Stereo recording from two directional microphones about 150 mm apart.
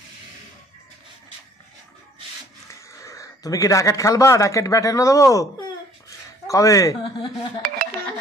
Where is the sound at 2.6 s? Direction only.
20° left (ahead or behind).